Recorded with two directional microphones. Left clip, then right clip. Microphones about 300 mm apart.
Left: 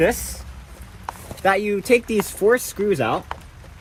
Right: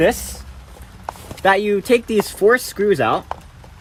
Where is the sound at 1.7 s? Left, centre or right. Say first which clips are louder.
Right 2 dB; right.